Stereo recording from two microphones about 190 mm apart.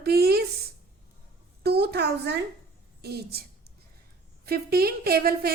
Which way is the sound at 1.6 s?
60° right (ahead or behind).